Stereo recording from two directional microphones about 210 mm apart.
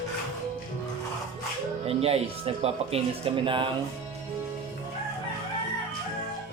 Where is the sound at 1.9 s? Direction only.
30° right (ahead or behind).